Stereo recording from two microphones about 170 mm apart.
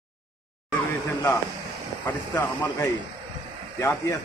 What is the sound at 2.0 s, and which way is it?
A man's voice, 10° left (ahead or behind).